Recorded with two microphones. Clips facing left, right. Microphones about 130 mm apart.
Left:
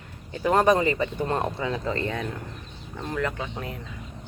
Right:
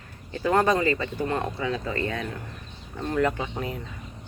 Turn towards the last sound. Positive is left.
turn(degrees=-5)  # may be behind; listen again after turning